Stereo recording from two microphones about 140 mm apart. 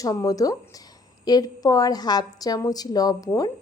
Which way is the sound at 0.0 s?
25° left (ahead or behind).